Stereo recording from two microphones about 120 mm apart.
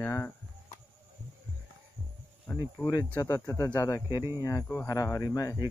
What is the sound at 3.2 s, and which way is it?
Speech, 25° left (ahead or behind).